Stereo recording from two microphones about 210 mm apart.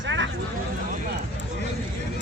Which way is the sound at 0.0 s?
60° right (ahead or behind).